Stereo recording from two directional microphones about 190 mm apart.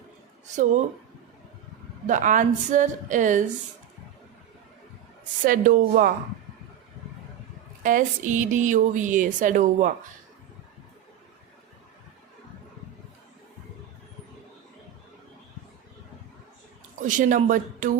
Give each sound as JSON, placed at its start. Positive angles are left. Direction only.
{"t": 0.5, "sound": "speech", "side_deg": -40}
{"t": 2.0, "sound": "speech", "side_deg": -40}
{"t": 5.5, "sound": "a woman's voice", "side_deg": -45}
{"t": 7.9, "sound": "a woman's voice", "side_deg": -45}
{"t": 17.0, "sound": "a woman's voice", "side_deg": -45}